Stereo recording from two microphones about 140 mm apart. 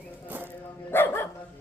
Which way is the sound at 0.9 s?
15° left (ahead or behind).